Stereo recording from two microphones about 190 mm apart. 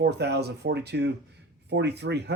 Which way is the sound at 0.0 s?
60° right (ahead or behind).